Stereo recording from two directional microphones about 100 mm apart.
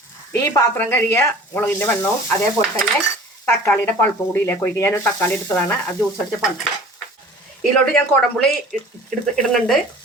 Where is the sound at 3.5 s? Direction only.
20° left (ahead or behind).